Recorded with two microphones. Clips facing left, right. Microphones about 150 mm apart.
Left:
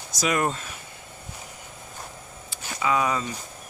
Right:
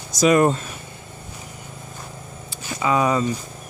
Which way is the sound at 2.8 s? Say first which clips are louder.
Right 5 dB; 35° right (ahead or behind).